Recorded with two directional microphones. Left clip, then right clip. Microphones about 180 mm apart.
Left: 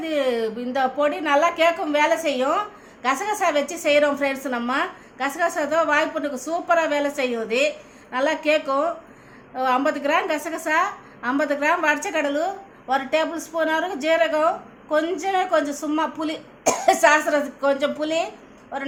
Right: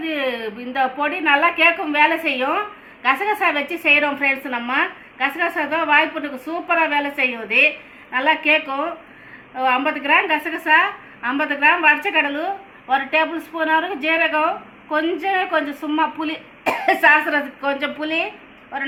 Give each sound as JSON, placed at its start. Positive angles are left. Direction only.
{"t": 0.0, "sound": "a woman's voice", "side_deg": 90}